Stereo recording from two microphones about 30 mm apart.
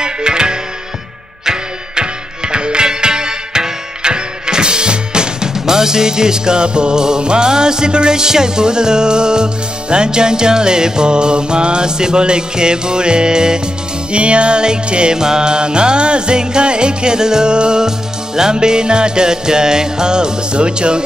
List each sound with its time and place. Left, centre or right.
0.0 s music: right
14.1 s music: right